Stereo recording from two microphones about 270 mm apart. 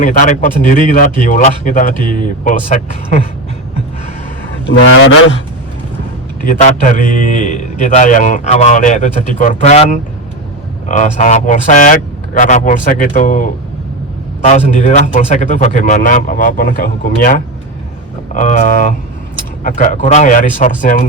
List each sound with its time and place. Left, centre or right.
0.0 s a man's voice: left
4.7 s speech: left
6.6 s a man's voice: left